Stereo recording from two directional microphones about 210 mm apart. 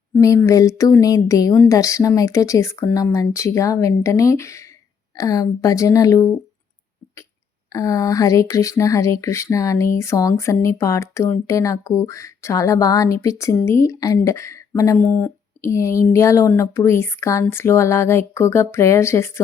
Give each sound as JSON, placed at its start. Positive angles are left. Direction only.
{"t": 0.2, "sound": "speech", "side_deg": 15}
{"t": 7.7, "sound": "speech", "side_deg": 15}